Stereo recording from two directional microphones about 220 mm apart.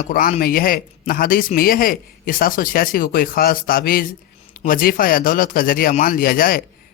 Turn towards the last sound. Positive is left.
turn(degrees=40)  # may be behind; listen again after turning